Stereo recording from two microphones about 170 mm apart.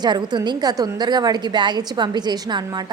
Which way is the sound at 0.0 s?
25° right (ahead or behind).